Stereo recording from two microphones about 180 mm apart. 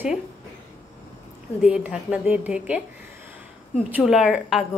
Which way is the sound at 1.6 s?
5° right (ahead or behind).